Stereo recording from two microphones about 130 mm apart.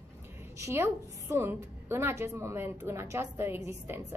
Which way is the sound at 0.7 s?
20° right (ahead or behind).